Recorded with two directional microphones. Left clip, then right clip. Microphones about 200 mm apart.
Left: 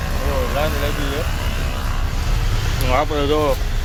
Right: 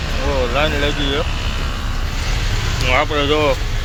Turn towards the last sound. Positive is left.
turn(degrees=15)  # may be behind; listen again after turning